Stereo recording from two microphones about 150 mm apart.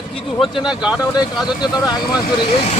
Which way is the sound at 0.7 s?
5° right (ahead or behind).